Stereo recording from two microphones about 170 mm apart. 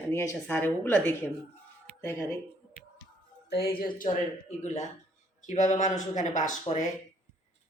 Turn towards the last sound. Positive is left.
turn(degrees=45)  # may be behind; listen again after turning